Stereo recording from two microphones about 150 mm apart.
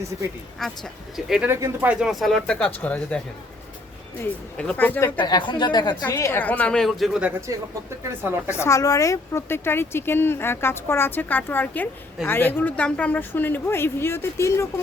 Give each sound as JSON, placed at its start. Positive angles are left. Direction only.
{"t": 0.6, "sound": "speech", "side_deg": 0}
{"t": 1.5, "sound": "speech", "side_deg": -15}
{"t": 4.2, "sound": "speech", "side_deg": 5}
{"t": 5.1, "sound": "speech", "side_deg": 30}
{"t": 6.1, "sound": "speech", "side_deg": 20}
{"t": 8.4, "sound": "speech", "side_deg": 20}